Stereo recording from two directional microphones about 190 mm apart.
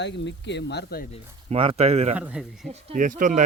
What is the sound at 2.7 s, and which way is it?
Speech, 40° right (ahead or behind).